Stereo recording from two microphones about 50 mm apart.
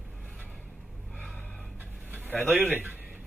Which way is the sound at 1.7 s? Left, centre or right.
Right.